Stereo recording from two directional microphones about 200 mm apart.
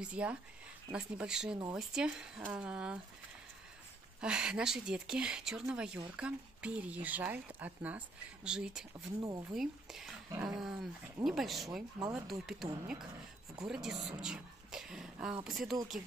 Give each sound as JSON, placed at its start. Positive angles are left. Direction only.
{"t": 0.0, "sound": "speech", "side_deg": -5}
{"t": 4.2, "sound": "speech", "side_deg": -5}
{"t": 9.2, "sound": "speech", "side_deg": -15}
{"t": 9.5, "sound": "speech", "side_deg": 0}